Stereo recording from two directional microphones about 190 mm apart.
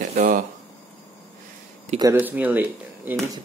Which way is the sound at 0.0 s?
40° right (ahead or behind).